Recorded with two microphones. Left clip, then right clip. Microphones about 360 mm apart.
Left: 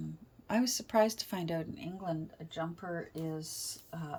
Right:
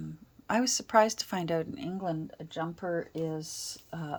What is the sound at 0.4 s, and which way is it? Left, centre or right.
Speech, centre.